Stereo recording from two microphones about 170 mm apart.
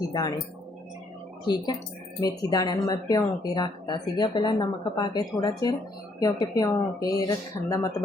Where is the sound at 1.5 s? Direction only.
25° left (ahead or behind).